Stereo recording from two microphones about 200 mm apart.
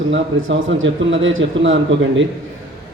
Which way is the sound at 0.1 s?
75° right (ahead or behind).